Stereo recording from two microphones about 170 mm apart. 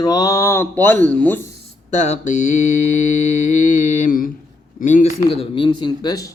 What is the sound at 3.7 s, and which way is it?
Mantra, 50° left (ahead or behind).